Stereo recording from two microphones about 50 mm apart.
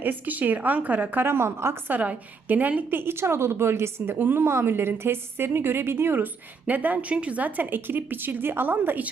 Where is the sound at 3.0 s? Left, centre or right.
Right.